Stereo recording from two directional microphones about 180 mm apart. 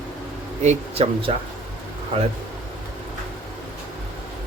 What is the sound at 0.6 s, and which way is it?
Speech, 40° right (ahead or behind).